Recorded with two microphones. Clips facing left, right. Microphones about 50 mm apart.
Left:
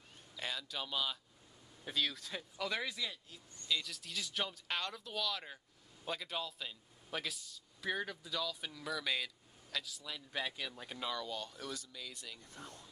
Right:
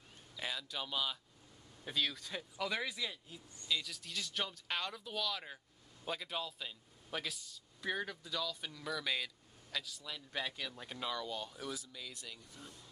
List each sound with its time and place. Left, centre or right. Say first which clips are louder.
0.4 s a man's voice: even; centre
12.4 s speech: left 2 dB; left